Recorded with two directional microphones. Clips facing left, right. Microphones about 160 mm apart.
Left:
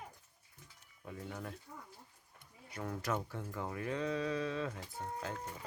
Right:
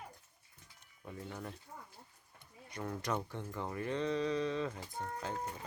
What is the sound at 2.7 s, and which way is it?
Speech, 5° left (ahead or behind).